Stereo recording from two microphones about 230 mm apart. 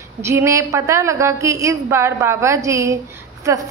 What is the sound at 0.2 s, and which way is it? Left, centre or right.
A woman's voice, centre.